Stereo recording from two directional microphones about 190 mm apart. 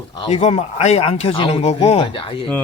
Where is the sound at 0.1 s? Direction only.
30° left (ahead or behind).